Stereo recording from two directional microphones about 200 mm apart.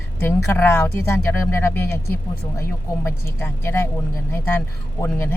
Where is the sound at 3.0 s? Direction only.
10° left (ahead or behind).